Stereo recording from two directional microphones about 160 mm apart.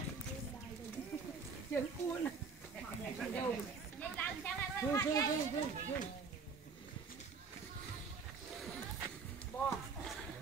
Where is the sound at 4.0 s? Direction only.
10° left (ahead or behind).